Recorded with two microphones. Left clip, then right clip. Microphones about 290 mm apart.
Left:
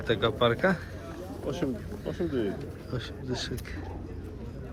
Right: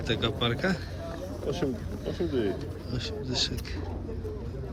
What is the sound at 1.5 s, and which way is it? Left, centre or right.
Speech, centre.